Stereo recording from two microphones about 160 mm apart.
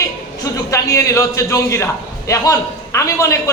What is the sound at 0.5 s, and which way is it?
A man's voice, 20° left (ahead or behind).